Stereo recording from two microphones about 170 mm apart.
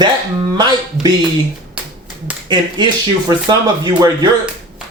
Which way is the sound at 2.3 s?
10° right (ahead or behind).